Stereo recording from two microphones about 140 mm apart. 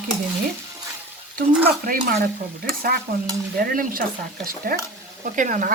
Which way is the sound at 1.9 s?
90° right.